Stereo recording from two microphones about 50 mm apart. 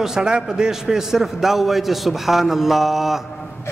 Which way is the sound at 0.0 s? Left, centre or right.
Centre.